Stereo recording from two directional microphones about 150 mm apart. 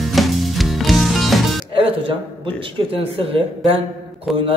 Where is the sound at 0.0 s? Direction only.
Centre (ahead or behind).